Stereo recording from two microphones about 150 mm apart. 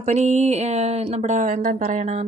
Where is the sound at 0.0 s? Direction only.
50° right (ahead or behind).